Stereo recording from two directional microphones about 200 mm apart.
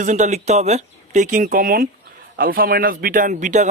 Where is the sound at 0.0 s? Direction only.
35° right (ahead or behind).